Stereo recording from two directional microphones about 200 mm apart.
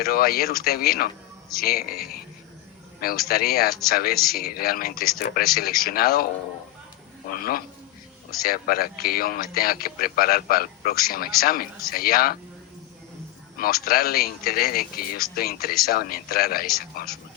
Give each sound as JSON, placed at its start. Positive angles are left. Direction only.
{"t": 0.0, "sound": "speech", "side_deg": 50}
{"t": 7.3, "sound": "speech", "side_deg": 45}
{"t": 13.6, "sound": "speech", "side_deg": 50}